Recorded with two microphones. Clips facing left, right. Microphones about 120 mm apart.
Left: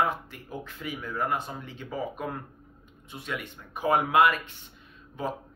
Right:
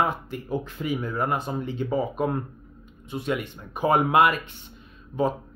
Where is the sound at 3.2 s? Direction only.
25° right (ahead or behind).